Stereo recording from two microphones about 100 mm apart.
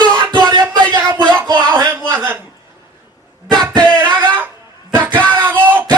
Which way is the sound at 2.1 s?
20° right (ahead or behind).